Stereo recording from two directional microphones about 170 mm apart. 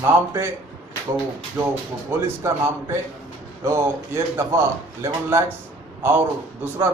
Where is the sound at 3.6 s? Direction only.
15° right (ahead or behind).